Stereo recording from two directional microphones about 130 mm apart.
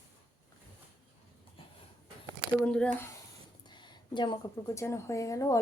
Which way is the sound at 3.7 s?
35° left (ahead or behind).